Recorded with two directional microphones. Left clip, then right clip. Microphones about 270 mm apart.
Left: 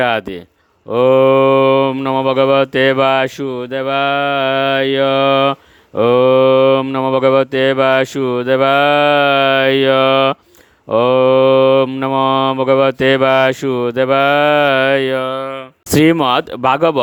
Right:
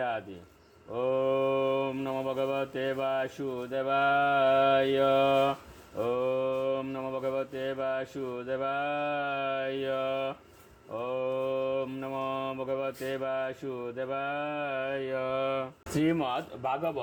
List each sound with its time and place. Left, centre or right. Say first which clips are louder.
0.9 s cattle: left 18 dB; left
16.0 s cattle: left 17 dB; left